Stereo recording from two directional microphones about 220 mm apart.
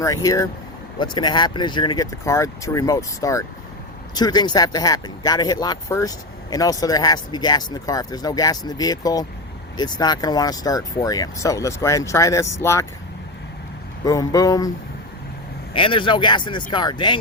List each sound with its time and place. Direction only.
0.0 s speech: 15° left (ahead or behind)
14.0 s speech: 15° left (ahead or behind)
15.7 s speech: 25° left (ahead or behind)